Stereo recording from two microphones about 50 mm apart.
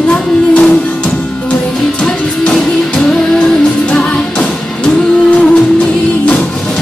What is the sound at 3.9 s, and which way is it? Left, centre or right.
Music, left.